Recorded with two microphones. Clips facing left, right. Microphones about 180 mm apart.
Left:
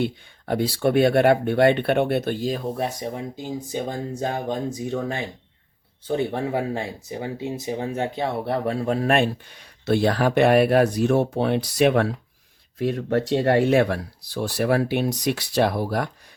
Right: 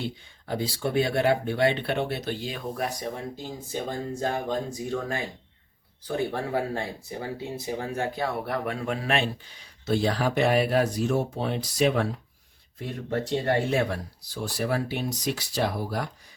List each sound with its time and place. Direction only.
0.0 s speech: 60° left (ahead or behind); by 2.6 s 40° left (ahead or behind)
2.7 s speech: 25° left (ahead or behind); by 16.0 s 65° left (ahead or behind)